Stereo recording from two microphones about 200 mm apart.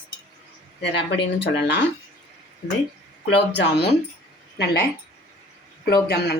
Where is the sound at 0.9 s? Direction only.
60° left (ahead or behind).